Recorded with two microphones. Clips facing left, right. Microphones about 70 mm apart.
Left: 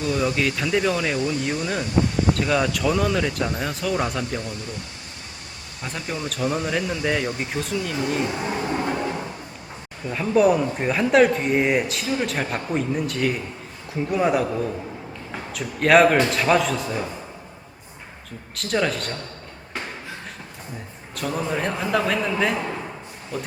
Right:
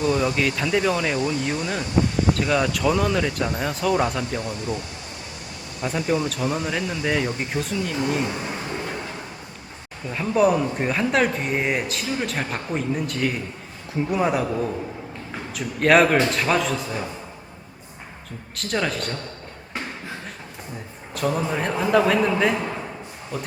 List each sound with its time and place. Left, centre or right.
0.0 s speech: centre
5.8 s speech: centre
8.2 s speech: centre
10.1 s speech: centre
18.5 s speech: centre
21.2 s speech: centre